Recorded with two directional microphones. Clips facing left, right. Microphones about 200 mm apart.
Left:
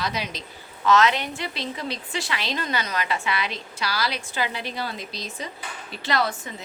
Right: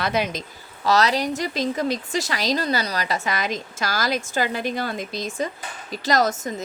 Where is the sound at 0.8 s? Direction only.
35° right (ahead or behind).